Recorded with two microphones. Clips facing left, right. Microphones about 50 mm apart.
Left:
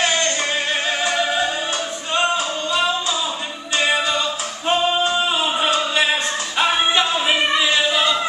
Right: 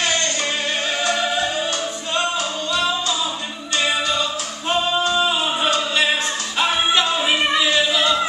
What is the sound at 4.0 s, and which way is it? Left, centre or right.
Singing, centre.